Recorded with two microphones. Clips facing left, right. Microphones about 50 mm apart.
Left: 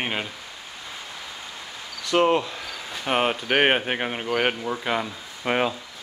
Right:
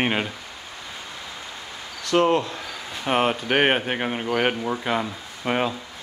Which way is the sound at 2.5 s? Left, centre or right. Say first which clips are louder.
Right 1 dB; centre.